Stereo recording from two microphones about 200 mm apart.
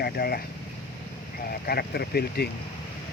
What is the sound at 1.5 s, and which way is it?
Speech, 50° left (ahead or behind).